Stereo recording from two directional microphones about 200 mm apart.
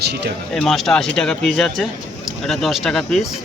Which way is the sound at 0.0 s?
55° right (ahead or behind).